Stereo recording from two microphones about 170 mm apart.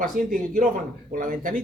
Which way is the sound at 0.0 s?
55° right (ahead or behind).